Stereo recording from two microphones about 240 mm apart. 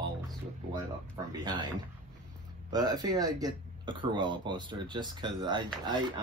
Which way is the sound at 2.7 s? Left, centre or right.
Centre.